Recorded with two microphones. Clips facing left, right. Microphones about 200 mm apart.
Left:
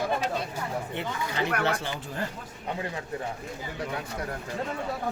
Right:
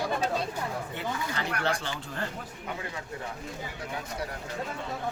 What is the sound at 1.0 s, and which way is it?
Speech, 20° left (ahead or behind).